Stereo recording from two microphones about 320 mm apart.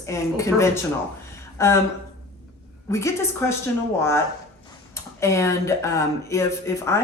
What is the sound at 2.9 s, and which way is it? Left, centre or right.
Speech, centre.